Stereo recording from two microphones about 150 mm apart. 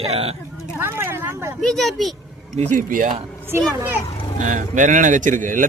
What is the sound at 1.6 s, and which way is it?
Speech, centre (ahead or behind).